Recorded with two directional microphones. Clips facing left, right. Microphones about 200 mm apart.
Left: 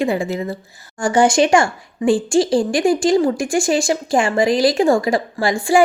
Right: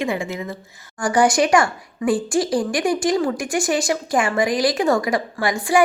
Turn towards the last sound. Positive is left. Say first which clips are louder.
# left 3 dB
turn(degrees=30)  # may be behind; listen again after turning